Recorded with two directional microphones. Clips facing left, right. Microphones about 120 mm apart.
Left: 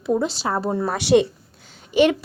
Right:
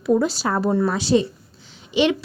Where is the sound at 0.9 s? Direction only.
70° left (ahead or behind).